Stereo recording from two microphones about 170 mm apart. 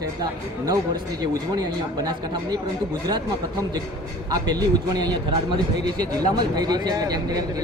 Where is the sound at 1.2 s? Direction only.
25° right (ahead or behind).